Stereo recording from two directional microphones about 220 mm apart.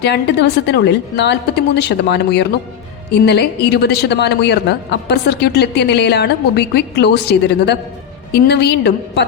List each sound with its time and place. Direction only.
0.0 s a woman's voice: 50° left (ahead or behind)